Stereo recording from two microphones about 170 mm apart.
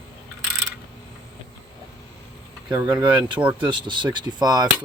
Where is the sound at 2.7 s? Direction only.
25° right (ahead or behind).